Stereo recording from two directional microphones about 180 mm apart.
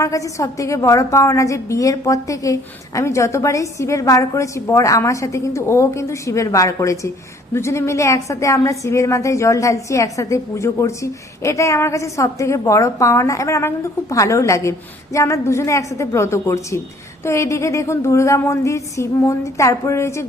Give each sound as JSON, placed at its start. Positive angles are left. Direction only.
{"t": 0.0, "sound": "speech", "side_deg": 15}